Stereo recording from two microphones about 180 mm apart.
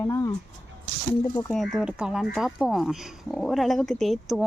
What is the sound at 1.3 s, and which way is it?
Speech, 20° left (ahead or behind).